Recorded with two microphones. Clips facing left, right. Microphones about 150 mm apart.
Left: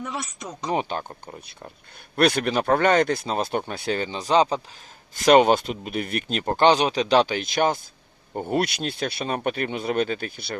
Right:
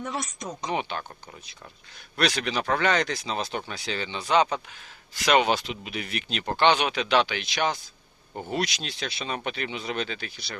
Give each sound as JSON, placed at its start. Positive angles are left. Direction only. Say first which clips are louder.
{"t": 0.0, "sound": "speech", "louder": "even", "side_deg": 5}
{"t": 0.6, "sound": "speech", "louder": "left 5 dB", "side_deg": 40}
{"t": 2.1, "sound": "speech", "louder": "left 6 dB", "side_deg": 50}
{"t": 5.1, "sound": "speech", "louder": "left 6 dB", "side_deg": 50}